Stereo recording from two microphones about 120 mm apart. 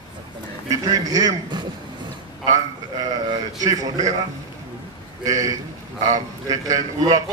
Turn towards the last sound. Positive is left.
turn(degrees=-30)  # may be behind; listen again after turning